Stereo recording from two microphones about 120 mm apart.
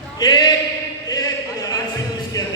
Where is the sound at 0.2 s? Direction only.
35° left (ahead or behind).